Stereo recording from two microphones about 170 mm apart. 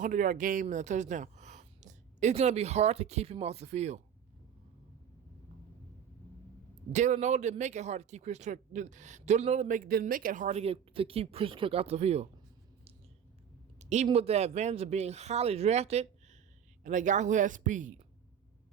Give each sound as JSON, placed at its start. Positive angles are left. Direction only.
{"t": 0.0, "sound": "speech", "side_deg": -50}
{"t": 6.9, "sound": "speech", "side_deg": -45}
{"t": 13.7, "sound": "speech", "side_deg": -40}